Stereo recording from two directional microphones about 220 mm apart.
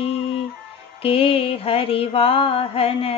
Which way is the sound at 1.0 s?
25° left (ahead or behind).